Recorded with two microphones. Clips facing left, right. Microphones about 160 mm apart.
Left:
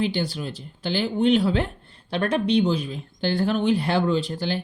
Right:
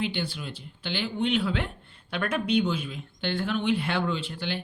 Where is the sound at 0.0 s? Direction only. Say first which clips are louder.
Left 6 dB; 40° left (ahead or behind).